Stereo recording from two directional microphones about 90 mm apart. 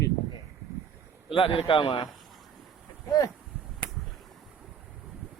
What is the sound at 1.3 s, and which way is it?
Speech, 80° left.